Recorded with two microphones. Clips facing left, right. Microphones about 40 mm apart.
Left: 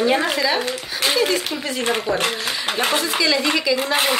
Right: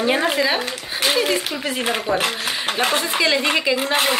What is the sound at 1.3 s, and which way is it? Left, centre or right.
Speech, centre.